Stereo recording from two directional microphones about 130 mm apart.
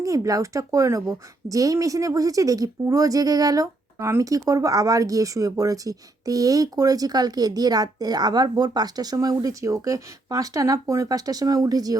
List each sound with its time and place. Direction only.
0.0 s speech: 25° right (ahead or behind)